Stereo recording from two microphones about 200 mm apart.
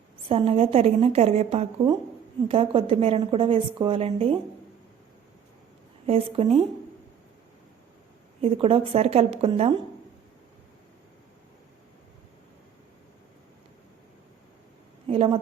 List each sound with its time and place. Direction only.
0.3 s a woman's voice: 30° right (ahead or behind)
6.1 s a woman's voice: 30° right (ahead or behind)
8.4 s a woman's voice: 30° right (ahead or behind)
15.0 s a woman's voice: 30° right (ahead or behind)